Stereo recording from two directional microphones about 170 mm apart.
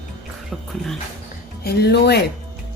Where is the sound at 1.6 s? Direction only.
70° left (ahead or behind).